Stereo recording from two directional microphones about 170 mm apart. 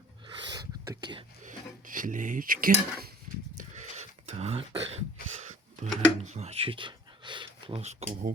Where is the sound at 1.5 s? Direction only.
50° right (ahead or behind).